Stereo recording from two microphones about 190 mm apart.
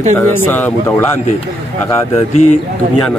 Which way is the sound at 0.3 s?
10° left (ahead or behind).